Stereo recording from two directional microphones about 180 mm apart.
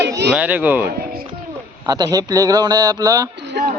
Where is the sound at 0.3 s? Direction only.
10° right (ahead or behind).